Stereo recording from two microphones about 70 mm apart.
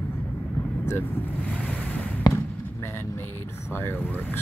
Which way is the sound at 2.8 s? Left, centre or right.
Left.